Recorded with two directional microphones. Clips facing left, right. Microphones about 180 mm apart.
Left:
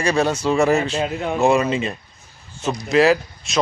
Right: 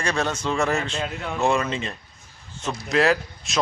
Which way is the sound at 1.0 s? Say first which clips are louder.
Left 7 dB; 20° left (ahead or behind).